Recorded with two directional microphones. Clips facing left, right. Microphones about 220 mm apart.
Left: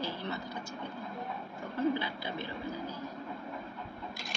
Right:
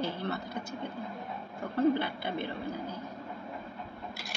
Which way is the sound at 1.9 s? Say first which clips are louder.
Right 4 dB; 55° right (ahead or behind).